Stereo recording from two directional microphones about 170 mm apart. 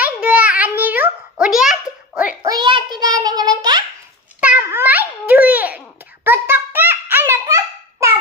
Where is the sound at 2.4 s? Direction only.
25° right (ahead or behind).